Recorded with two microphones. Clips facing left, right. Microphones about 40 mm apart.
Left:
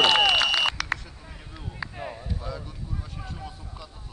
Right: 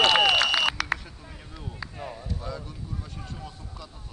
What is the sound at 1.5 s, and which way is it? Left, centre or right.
Speech, centre.